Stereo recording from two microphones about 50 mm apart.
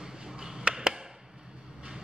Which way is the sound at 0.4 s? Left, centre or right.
Centre.